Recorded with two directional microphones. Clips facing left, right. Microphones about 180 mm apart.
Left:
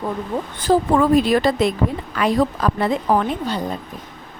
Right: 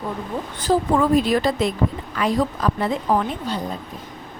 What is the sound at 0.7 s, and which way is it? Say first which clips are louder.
A woman's voice: left 2 dB; 60° left (ahead or behind).